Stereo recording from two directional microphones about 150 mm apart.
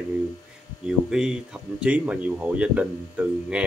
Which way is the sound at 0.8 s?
5° right (ahead or behind).